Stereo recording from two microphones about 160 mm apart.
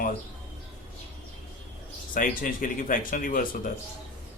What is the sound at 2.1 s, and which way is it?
Speech, 55° left (ahead or behind).